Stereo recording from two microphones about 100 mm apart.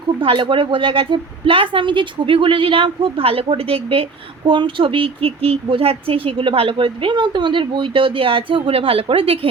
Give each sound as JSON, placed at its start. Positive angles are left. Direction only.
{"t": 0.2, "sound": "a woman's voice", "side_deg": -60}